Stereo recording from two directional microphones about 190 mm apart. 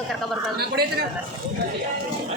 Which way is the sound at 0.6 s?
55° right (ahead or behind).